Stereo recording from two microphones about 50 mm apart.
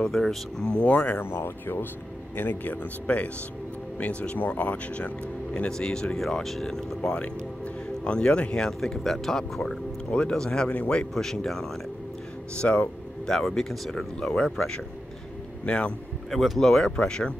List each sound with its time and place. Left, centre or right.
0.0 s speech: centre
0.7 s speech: left
1.2 s speech: left
5.5 s speech: centre
6.1 s speech: centre
7.2 s speech: left
10.7 s speech: left
11.1 s speech: centre
12.5 s speech: left
13.3 s a man's voice: centre
16.3 s speech: centre